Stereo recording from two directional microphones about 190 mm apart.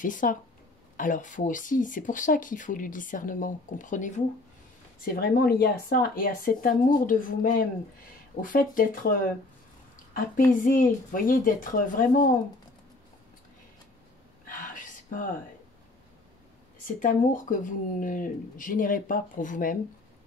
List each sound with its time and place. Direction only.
0.0 s speech: 45° left (ahead or behind)
5.0 s speech: 50° left (ahead or behind)
10.6 s speech: 45° left (ahead or behind)
14.4 s a sound: 45° left (ahead or behind)
16.8 s speech: 45° left (ahead or behind)